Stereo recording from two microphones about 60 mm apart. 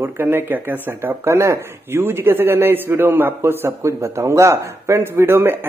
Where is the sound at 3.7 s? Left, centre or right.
Right.